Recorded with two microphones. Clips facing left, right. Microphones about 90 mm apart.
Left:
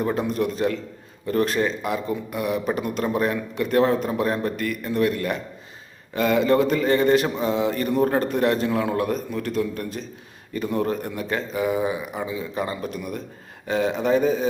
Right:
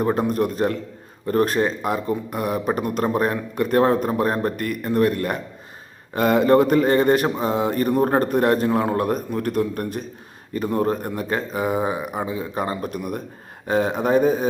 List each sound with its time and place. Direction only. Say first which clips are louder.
0.0 s a man's voice: right 3 dB; 40° right (ahead or behind)
10.5 s a man's voice: right 3 dB; 40° right (ahead or behind)